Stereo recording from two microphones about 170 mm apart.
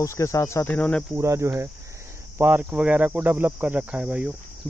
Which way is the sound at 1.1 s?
15° right (ahead or behind).